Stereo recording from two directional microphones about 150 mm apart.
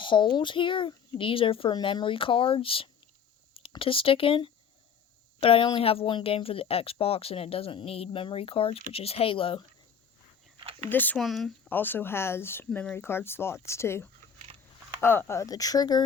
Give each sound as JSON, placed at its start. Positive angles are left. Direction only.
{"t": 0.0, "sound": "speech", "side_deg": 35}
{"t": 10.6, "sound": "a sound", "side_deg": -40}
{"t": 10.8, "sound": "speech", "side_deg": 10}
{"t": 11.2, "sound": "speech", "side_deg": 0}
{"t": 11.7, "sound": "speech", "side_deg": 15}